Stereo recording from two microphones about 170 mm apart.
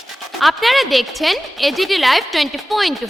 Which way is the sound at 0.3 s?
Centre (ahead or behind).